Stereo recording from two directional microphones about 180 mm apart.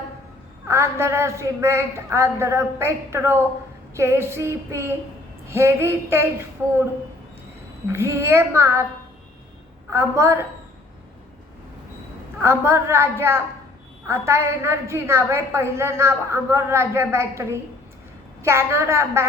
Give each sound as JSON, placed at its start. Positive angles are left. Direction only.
{"t": 0.7, "sound": "a woman's voice", "side_deg": -15}
{"t": 7.9, "sound": "a woman's voice", "side_deg": -15}
{"t": 9.9, "sound": "a woman's voice", "side_deg": -15}
{"t": 12.4, "sound": "a woman's voice", "side_deg": -15}